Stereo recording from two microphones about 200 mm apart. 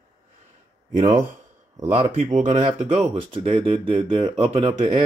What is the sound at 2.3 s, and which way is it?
Speech, 40° right (ahead or behind).